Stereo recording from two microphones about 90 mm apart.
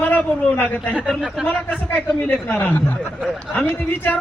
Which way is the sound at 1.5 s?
20° left (ahead or behind).